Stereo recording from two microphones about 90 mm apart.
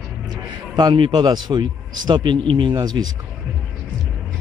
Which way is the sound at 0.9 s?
60° right (ahead or behind).